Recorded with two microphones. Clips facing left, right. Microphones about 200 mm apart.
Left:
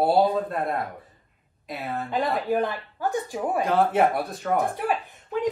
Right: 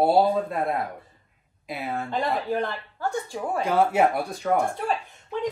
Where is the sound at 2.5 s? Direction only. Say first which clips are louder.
Left 3 dB; 15° left (ahead or behind).